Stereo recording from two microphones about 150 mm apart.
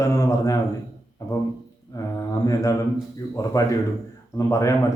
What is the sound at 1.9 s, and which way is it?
Mantra, 20° left (ahead or behind).